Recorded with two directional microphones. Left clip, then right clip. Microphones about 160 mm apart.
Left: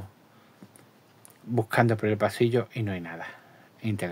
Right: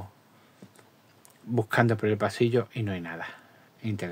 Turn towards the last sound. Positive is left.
turn(degrees=15)  # may be behind; listen again after turning